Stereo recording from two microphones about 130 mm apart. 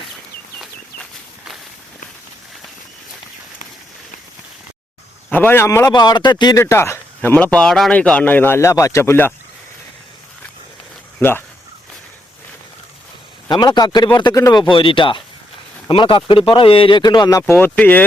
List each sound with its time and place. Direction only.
5.3 s speech: 15° left (ahead or behind)
5.9 s speech: 35° left (ahead or behind); by 9.3 s 15° left (ahead or behind)
11.2 s speech: 15° left (ahead or behind)
13.5 s speech: 30° left (ahead or behind)
17.4 s speech: 15° left (ahead or behind)